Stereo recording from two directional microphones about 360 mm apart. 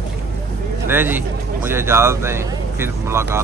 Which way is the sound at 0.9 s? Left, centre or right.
Centre.